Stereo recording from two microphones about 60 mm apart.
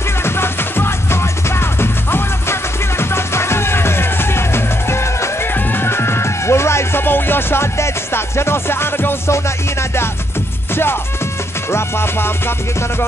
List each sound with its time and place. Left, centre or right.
0.2 s music: left
5.5 s music: left
9.3 s music: left